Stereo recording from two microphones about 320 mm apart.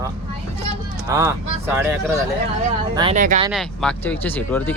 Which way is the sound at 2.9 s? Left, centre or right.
Centre.